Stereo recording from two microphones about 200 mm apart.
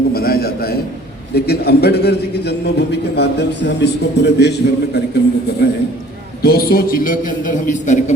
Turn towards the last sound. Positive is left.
turn(degrees=40)  # may be behind; listen again after turning